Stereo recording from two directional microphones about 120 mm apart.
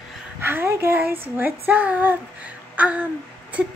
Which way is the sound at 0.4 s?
20° right (ahead or behind).